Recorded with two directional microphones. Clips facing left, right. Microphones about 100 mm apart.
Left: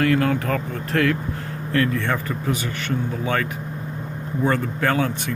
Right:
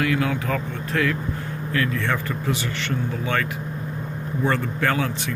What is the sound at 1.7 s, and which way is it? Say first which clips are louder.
Speech: left 3 dB; 35° left (ahead or behind).